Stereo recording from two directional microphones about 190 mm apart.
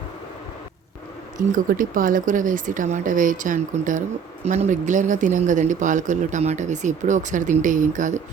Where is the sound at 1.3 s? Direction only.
45° right (ahead or behind).